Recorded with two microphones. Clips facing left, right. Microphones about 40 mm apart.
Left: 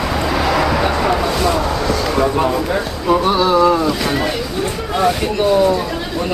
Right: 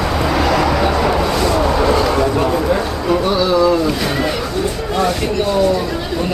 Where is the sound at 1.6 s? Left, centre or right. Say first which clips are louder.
Right 4 dB; centre.